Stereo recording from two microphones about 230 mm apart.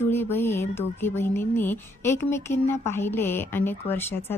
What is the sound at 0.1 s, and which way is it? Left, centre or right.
A woman's voice, centre.